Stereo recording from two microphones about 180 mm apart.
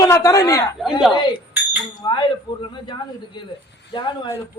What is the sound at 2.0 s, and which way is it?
Speech, 25° left (ahead or behind).